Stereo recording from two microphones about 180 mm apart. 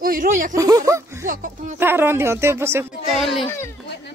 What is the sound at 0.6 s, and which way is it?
Speech, 20° right (ahead or behind).